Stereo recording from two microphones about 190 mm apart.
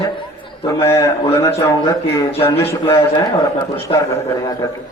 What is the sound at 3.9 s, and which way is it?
Speech, 25° left (ahead or behind).